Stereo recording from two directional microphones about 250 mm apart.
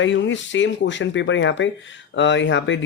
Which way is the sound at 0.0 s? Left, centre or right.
Left.